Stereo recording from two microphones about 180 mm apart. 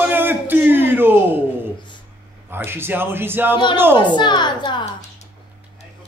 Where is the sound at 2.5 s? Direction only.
10° right (ahead or behind).